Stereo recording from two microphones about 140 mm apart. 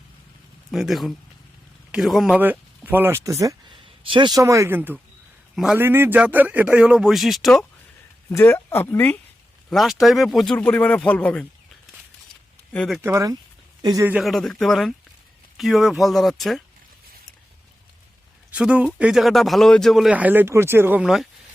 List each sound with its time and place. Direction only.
0.7 s speech: centre (ahead or behind); by 3.5 s 20° right (ahead or behind)
3.7 s speech: 35° right (ahead or behind); by 7.6 s centre (ahead or behind)
8.3 s speech: 20° left (ahead or behind)
9.6 s speech: centre (ahead or behind)
12.7 s speech: 5° left (ahead or behind)
13.0 s speech: 20° right (ahead or behind)
14.2 s speech: centre (ahead or behind)
18.5 s speech: 10° right (ahead or behind)
21.0 s speech: 5° right (ahead or behind)